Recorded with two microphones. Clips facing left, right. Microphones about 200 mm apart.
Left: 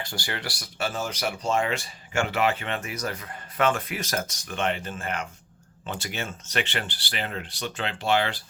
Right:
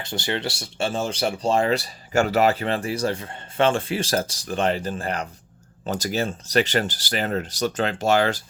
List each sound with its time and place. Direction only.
0.0 s speech: 25° right (ahead or behind); by 8.4 s 45° right (ahead or behind)